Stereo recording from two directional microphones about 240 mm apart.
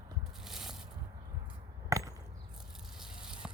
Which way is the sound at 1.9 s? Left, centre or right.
Centre.